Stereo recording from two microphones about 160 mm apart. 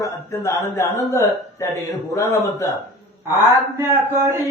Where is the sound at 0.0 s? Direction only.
15° left (ahead or behind).